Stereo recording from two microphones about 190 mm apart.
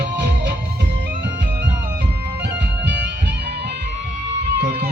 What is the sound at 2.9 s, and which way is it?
Music, 65° right (ahead or behind).